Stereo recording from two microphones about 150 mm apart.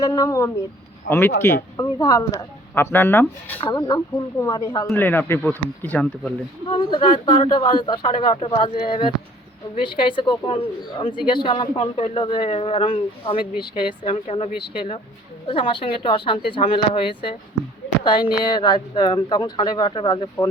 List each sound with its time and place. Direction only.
0.0 s speech: 25° left (ahead or behind)
1.7 s speech: 25° left (ahead or behind)
3.6 s speech: 30° left (ahead or behind)
4.9 s speech: 15° left (ahead or behind)
6.7 s a woman's voice: 35° left (ahead or behind)